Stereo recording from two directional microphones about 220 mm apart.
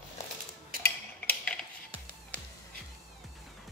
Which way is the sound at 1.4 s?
5° left (ahead or behind).